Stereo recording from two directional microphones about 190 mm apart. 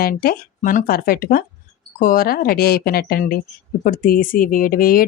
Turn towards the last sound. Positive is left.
turn(degrees=50)  # may be behind; listen again after turning